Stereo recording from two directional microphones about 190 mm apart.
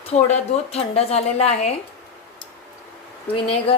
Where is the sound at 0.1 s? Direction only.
35° left (ahead or behind).